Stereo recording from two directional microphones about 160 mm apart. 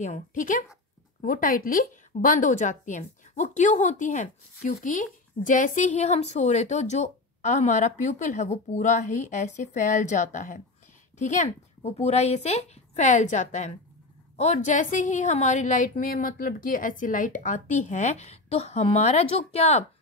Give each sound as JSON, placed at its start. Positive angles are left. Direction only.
{"t": 0.0, "sound": "a woman's voice", "side_deg": 50}